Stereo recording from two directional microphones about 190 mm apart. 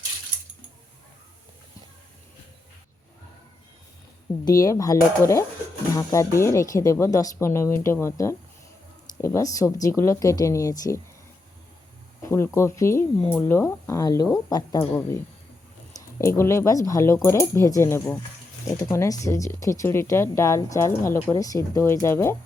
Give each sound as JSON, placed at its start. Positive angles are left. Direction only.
{"t": 4.4, "sound": "speech", "side_deg": 15}
{"t": 12.2, "sound": "speech", "side_deg": 15}